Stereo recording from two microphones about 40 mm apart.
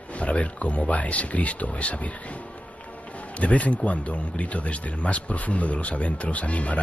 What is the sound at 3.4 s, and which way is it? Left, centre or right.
A man's voice, left.